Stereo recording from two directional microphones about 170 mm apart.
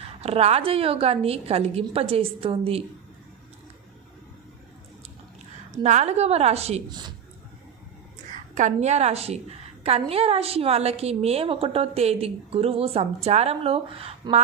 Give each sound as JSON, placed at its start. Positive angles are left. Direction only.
{"t": 0.0, "sound": "a woman's voice", "side_deg": -35}
{"t": 5.7, "sound": "a woman's voice", "side_deg": -45}
{"t": 8.3, "sound": "a woman's voice", "side_deg": -45}